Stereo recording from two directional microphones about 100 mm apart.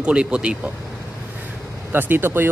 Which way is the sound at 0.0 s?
10° right (ahead or behind).